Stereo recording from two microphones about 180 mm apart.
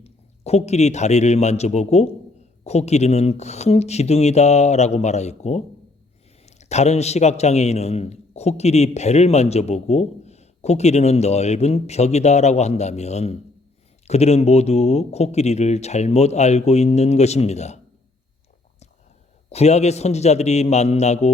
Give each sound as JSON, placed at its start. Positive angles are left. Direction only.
{"t": 0.0, "sound": "a man's voice", "side_deg": 35}
{"t": 19.5, "sound": "a man's voice", "side_deg": 35}